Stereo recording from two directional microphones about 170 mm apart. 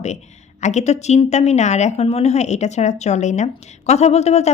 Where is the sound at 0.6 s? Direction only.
45° left (ahead or behind).